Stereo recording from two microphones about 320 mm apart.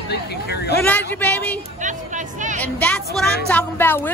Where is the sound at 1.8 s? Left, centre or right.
Right.